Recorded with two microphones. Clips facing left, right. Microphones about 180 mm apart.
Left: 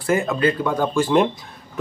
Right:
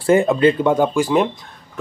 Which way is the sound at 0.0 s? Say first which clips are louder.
Right 6 dB; 30° right (ahead or behind).